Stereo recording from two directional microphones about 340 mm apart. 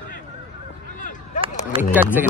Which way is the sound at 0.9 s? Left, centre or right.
Left.